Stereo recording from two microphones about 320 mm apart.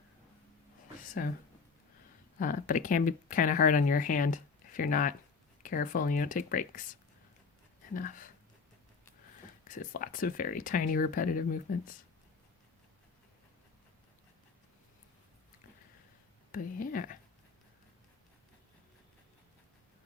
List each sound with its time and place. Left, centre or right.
1.2 s speech: left
2.4 s speech: left
7.9 s speech: left
9.6 s speech: left
16.5 s speech: left